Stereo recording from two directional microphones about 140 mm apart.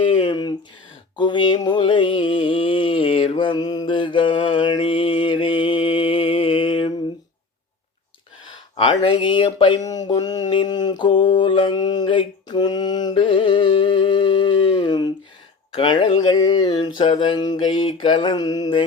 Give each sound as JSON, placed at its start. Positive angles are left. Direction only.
{"t": 0.0, "sound": "a sound", "side_deg": 35}
{"t": 8.4, "sound": "speech", "side_deg": 40}
{"t": 11.2, "sound": "mantra", "side_deg": 35}